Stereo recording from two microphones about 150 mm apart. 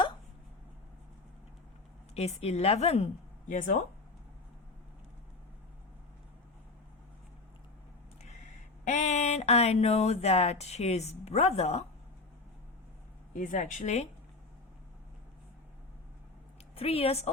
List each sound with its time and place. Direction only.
2.1 s a woman's voice: 45° left (ahead or behind)
8.2 s a sound: 50° left (ahead or behind)
13.3 s a woman's voice: 60° left (ahead or behind)
16.7 s a woman's voice: 40° left (ahead or behind)